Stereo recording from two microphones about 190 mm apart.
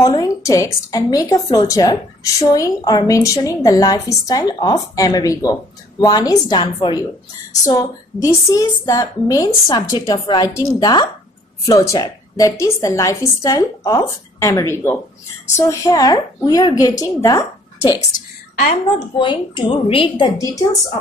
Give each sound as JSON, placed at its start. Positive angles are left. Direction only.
{"t": 0.0, "sound": "a woman's voice", "side_deg": 20}
{"t": 19.1, "sound": "a woman's voice", "side_deg": 25}